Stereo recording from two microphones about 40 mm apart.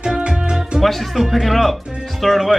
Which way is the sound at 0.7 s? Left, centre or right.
Centre.